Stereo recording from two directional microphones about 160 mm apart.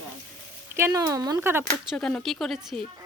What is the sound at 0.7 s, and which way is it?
Speech, 20° right (ahead or behind).